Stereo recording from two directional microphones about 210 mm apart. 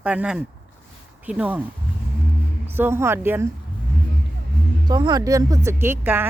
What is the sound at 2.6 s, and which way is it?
Speech, 10° right (ahead or behind).